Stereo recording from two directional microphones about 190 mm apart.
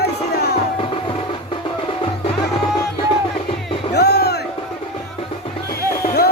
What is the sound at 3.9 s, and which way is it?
Music, 60° left (ahead or behind).